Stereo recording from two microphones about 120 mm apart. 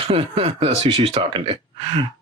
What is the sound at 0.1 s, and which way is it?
Speech, 50° right (ahead or behind).